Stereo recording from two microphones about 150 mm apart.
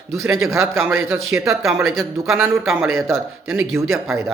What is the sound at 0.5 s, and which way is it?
Speech, 20° right (ahead or behind).